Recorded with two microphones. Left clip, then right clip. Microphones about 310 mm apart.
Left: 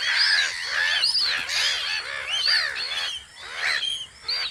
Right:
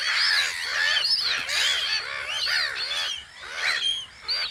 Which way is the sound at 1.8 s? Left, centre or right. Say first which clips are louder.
Right 1 dB; right.